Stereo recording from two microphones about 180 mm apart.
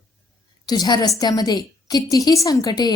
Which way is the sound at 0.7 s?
20° left (ahead or behind).